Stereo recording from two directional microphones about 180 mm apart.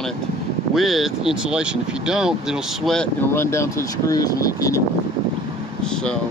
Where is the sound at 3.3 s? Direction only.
15° left (ahead or behind).